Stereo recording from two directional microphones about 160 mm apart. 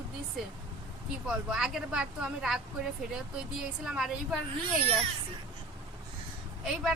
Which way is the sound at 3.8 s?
5° right (ahead or behind).